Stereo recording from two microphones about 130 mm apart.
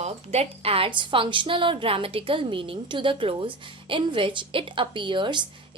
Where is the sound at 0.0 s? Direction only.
55° right (ahead or behind).